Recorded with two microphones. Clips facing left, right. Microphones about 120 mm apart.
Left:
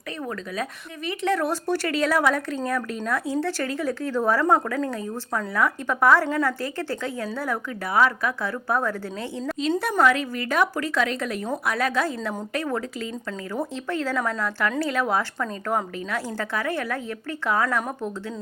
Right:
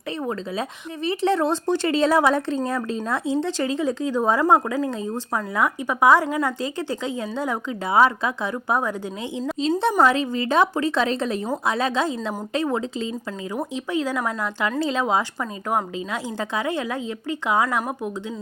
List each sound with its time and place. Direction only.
1.0 s a woman's voice: 30° right (ahead or behind); by 18.1 s 10° right (ahead or behind)